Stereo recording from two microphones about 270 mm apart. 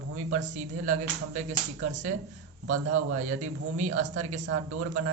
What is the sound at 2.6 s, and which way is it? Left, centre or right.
Speech, right.